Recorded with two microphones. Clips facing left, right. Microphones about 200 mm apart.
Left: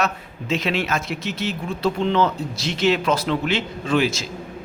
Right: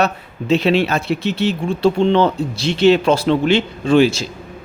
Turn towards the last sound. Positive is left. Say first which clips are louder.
# right 8 dB
turn(degrees=-30)  # may be behind; listen again after turning